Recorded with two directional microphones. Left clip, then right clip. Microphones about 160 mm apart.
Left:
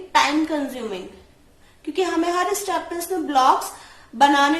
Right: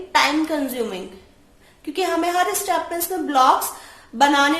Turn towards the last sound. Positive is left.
turn(degrees=-30)  # may be behind; listen again after turning